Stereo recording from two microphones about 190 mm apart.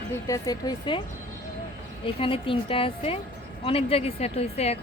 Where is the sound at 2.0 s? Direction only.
25° left (ahead or behind).